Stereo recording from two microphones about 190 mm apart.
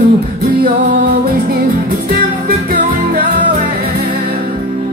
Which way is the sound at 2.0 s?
45° right (ahead or behind).